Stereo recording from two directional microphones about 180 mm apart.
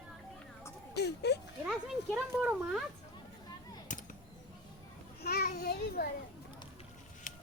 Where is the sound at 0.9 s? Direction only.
70° left (ahead or behind).